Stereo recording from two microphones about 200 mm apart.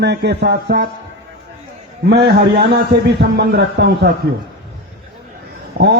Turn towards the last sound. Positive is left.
turn(degrees=-45)  # may be behind; listen again after turning